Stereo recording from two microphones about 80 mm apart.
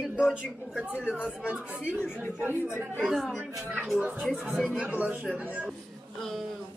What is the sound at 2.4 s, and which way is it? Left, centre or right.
Speech, right.